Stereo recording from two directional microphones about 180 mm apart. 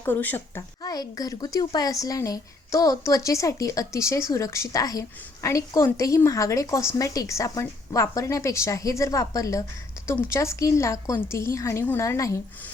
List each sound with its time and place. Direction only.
0.0 s speech: 10° left (ahead or behind)